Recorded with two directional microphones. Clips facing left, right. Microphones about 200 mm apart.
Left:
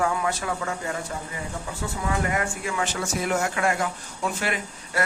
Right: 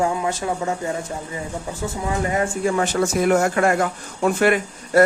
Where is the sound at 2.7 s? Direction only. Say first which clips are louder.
Right 6 dB; 45° right (ahead or behind).